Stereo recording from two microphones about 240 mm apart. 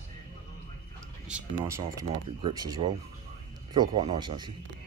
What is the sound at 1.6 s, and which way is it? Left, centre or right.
Speech, centre.